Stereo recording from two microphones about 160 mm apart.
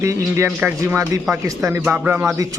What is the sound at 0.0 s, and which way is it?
A man's voice, 20° right (ahead or behind).